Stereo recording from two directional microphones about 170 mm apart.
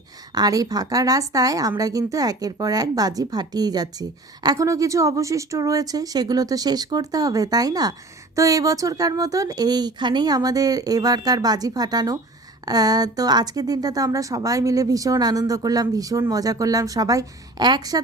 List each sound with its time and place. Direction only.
0.3 s a woman's voice: 20° right (ahead or behind)